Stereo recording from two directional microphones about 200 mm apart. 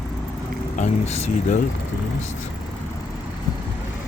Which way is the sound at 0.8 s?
35° left (ahead or behind).